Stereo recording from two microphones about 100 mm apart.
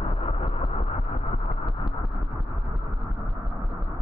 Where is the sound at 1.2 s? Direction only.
55° left (ahead or behind).